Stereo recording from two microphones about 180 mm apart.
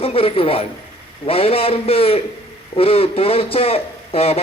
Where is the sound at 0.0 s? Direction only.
30° left (ahead or behind).